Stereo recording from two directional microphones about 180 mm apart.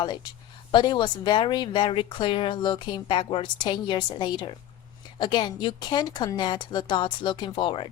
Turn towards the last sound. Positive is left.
turn(degrees=30)  # may be behind; listen again after turning